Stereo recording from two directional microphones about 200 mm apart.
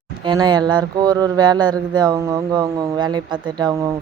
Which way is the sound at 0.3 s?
20° right (ahead or behind).